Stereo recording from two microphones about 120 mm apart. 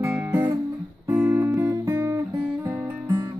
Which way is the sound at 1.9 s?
20° right (ahead or behind).